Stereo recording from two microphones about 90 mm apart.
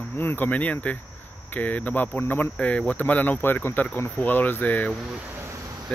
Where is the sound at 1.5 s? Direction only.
20° left (ahead or behind).